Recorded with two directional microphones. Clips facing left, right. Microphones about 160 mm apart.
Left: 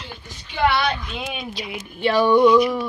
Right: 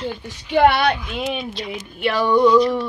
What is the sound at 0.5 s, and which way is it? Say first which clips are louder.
Speech: right 5 dB; 60° right (ahead or behind).